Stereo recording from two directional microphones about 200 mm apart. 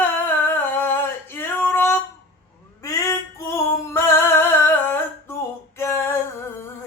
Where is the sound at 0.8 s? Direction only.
10° left (ahead or behind).